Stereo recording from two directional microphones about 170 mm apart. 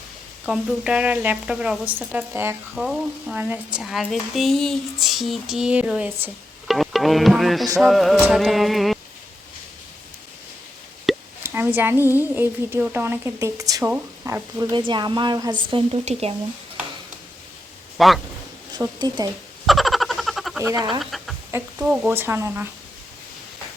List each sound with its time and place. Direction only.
0.4 s a woman's voice: 5° right (ahead or behind)
2.7 s speech: centre (ahead or behind)
6.7 s music: centre (ahead or behind)
7.8 s speech: centre (ahead or behind)
11.1 s plop: centre (ahead or behind)
11.4 s a woman's voice: 15° right (ahead or behind); by 16.3 s 35° right (ahead or behind)
17.9 s a man's voice: centre (ahead or behind)
18.7 s speech: 25° right (ahead or behind)
19.6 s frog: centre (ahead or behind)
20.6 s speech: 15° right (ahead or behind)
21.0 s a woman's voice: centre (ahead or behind)